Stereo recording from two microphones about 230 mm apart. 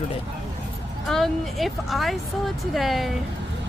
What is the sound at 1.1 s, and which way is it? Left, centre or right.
Speech, centre.